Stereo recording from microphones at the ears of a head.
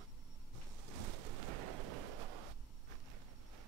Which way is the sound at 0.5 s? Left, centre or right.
Right.